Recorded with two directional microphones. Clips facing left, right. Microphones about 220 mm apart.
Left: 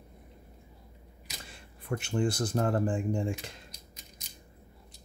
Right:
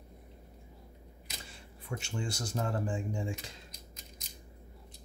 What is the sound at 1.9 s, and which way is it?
Speech, 55° left (ahead or behind).